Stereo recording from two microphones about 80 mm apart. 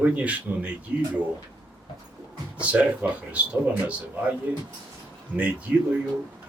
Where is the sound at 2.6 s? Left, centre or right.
Centre.